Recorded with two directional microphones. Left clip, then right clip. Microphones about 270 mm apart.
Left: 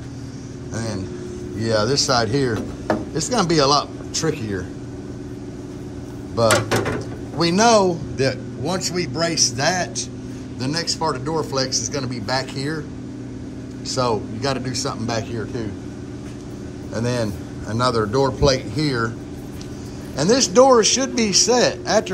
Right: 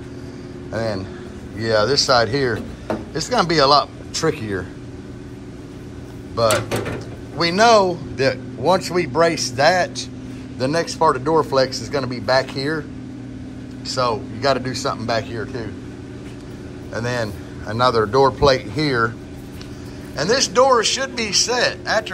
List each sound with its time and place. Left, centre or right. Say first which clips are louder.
0.7 s a man's voice: right 5 dB; centre
6.3 s a man's voice: left 1 dB; centre
13.8 s a man's voice: right 1 dB; centre
16.9 s a man's voice: even; centre
20.2 s a man's voice: left 1 dB; left